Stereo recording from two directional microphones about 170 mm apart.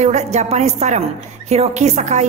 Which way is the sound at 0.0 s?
40° right (ahead or behind).